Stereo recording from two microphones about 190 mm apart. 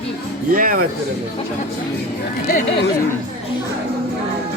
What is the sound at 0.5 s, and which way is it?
Speech, 45° right (ahead or behind).